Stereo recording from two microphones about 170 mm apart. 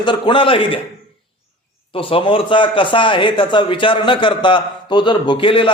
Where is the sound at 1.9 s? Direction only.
30° left (ahead or behind).